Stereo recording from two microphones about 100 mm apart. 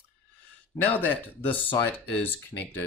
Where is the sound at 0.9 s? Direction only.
15° left (ahead or behind).